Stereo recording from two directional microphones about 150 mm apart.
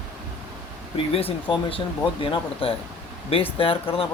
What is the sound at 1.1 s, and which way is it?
Speech, 40° left (ahead or behind).